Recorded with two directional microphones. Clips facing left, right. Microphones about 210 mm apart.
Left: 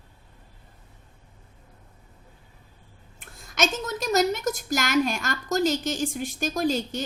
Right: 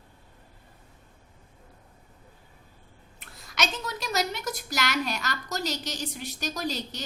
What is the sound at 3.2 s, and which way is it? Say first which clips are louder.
A woman's voice: left 5 dB; 50° left (ahead or behind).